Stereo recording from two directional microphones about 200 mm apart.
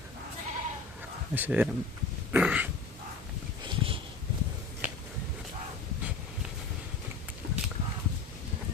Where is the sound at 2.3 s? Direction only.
5° right (ahead or behind).